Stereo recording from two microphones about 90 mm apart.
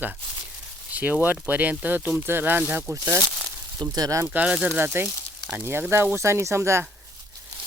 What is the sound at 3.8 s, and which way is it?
Speech, 45° right (ahead or behind).